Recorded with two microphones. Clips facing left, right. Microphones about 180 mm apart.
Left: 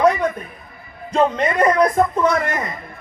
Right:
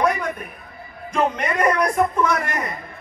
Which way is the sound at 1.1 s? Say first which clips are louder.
Left 4 dB; 30° left (ahead or behind).